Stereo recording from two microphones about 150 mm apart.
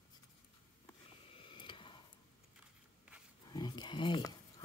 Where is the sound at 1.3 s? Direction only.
35° left (ahead or behind).